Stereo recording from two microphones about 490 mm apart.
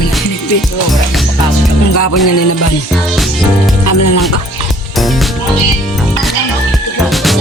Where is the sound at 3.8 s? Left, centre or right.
Left.